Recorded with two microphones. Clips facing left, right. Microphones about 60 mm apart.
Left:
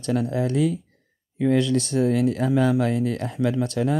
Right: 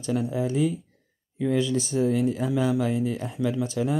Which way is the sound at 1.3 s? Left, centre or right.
Left.